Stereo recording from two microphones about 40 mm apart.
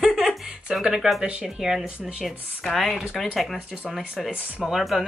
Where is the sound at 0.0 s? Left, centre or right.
Centre.